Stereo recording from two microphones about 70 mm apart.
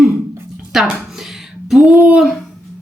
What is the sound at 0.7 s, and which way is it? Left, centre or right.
Speech, centre.